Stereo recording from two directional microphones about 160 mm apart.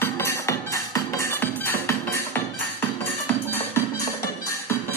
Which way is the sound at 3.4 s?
10° left (ahead or behind).